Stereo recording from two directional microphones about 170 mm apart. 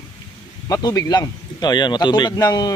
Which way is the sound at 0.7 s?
25° left (ahead or behind).